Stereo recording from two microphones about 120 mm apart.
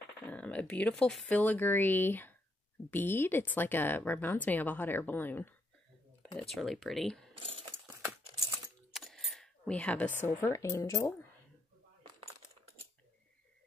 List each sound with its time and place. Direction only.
0.3 s speech: 10° left (ahead or behind)
6.5 s speech: centre (ahead or behind)
8.9 s coin: centre (ahead or behind)
10.2 s speech: 20° left (ahead or behind)